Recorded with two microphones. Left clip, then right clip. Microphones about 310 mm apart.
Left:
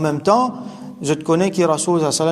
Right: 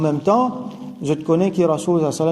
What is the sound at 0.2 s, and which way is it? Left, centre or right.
A man's voice, centre.